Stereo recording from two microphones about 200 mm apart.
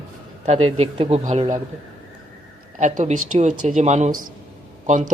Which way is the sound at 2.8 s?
35° right (ahead or behind).